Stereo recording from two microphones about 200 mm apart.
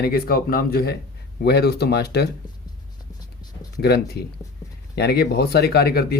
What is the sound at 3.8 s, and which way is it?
Speech, 55° left (ahead or behind).